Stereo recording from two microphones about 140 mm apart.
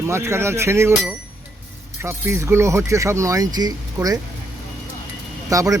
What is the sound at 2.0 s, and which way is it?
Speech, 20° right (ahead or behind).